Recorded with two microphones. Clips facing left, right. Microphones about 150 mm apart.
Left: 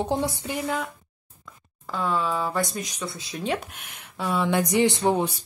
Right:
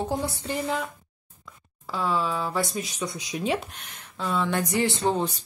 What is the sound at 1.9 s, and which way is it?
A woman's voice, centre (ahead or behind).